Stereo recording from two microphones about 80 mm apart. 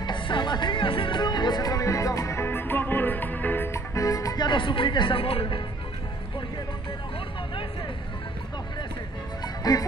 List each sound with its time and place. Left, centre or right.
0.0 s music: left
2.4 s music: left
3.7 s music: left
4.5 s speech: left
9.4 s music: left